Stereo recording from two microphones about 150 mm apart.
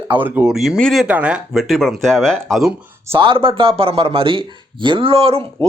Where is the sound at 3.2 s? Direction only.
35° right (ahead or behind).